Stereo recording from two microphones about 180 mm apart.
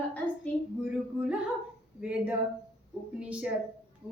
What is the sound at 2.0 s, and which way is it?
A woman's voice, 5° right (ahead or behind).